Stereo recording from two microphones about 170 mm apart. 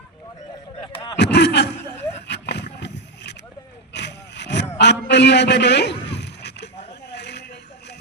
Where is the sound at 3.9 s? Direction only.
90° left.